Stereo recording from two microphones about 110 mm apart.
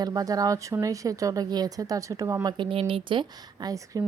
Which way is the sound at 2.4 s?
45° right (ahead or behind).